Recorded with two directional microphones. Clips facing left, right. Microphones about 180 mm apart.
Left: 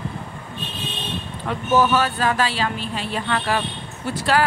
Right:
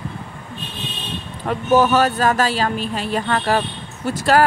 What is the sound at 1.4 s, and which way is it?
Speech, 45° right (ahead or behind).